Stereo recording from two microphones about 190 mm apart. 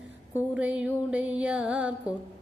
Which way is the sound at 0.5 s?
5° right (ahead or behind).